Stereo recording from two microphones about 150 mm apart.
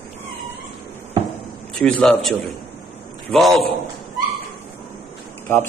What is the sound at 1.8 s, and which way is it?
Speech, 5° left (ahead or behind).